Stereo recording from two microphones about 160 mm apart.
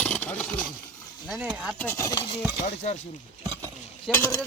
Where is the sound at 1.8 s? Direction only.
15° left (ahead or behind).